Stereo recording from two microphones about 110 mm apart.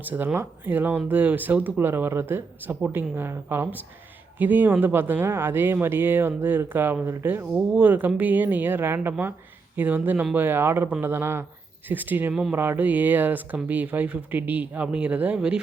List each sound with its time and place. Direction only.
0.0 s speech: 15° right (ahead or behind)
7.5 s speech: 10° right (ahead or behind)
12.3 s speech: 5° right (ahead or behind)
12.5 s speech: 20° right (ahead or behind)